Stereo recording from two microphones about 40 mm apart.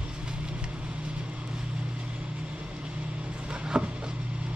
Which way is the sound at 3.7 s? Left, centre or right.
Centre.